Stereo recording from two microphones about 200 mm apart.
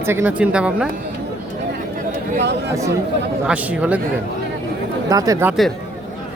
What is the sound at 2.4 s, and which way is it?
Speech, 60° right (ahead or behind).